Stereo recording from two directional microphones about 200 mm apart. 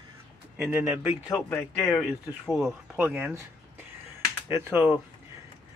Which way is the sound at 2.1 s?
Centre (ahead or behind).